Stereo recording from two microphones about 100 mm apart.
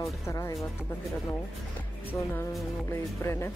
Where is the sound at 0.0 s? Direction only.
35° left (ahead or behind).